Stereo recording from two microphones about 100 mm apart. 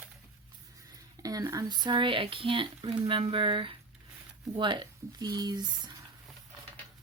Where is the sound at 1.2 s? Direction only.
40° right (ahead or behind).